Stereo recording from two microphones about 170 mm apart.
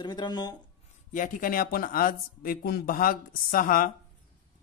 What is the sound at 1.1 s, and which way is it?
Speech, 55° left (ahead or behind).